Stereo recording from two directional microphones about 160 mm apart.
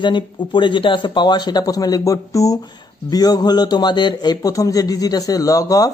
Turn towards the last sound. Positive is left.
turn(degrees=20)  # may be behind; listen again after turning